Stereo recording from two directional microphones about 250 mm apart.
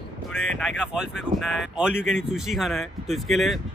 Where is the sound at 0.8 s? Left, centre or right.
Centre.